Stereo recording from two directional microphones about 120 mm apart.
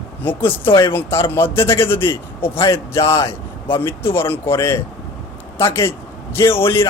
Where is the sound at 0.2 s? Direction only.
15° left (ahead or behind).